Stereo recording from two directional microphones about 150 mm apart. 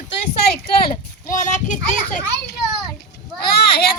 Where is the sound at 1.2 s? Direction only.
55° left (ahead or behind).